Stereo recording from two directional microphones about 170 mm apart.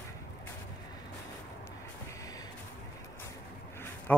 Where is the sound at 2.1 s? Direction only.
20° left (ahead or behind).